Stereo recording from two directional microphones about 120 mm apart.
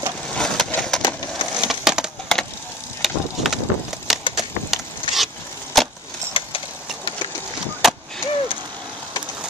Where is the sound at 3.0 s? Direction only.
Centre (ahead or behind).